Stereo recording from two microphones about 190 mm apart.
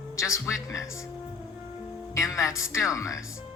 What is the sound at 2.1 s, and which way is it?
Speech, 15° left (ahead or behind).